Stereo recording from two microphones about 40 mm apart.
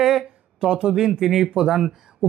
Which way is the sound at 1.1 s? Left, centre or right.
Centre.